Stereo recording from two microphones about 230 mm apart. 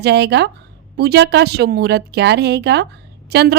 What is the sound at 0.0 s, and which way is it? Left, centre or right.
Speech, right.